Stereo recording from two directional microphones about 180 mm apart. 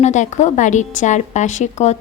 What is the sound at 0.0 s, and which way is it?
A woman's voice, 40° left (ahead or behind).